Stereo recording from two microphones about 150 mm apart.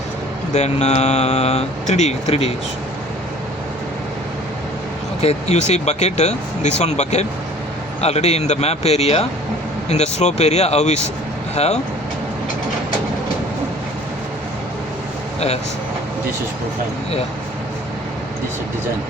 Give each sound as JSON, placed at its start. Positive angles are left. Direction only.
{"t": 0.5, "sound": "speech", "side_deg": 50}
{"t": 5.2, "sound": "speech", "side_deg": 45}